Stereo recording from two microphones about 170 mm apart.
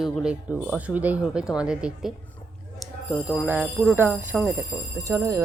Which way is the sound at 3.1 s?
20° left (ahead or behind).